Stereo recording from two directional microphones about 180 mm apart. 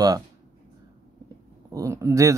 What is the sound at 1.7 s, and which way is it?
Speech, 15° right (ahead or behind).